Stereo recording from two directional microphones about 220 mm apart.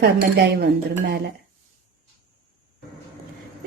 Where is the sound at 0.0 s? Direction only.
50° right (ahead or behind).